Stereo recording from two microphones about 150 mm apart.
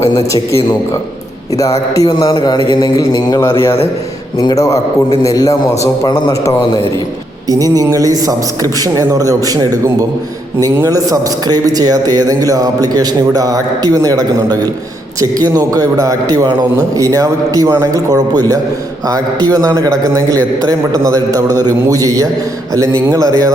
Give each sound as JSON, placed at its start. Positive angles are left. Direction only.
{"t": 0.0, "sound": "speech", "side_deg": 25}
{"t": 2.0, "sound": "speech", "side_deg": 30}
{"t": 7.5, "sound": "a man's voice", "side_deg": -25}